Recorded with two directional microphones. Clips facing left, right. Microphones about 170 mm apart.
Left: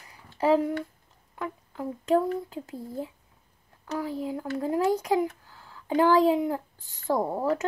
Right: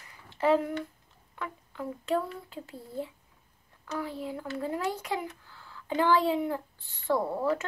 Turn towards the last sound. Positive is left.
turn(degrees=40)  # may be behind; listen again after turning